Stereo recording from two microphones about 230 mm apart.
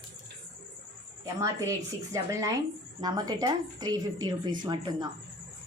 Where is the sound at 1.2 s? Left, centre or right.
Centre.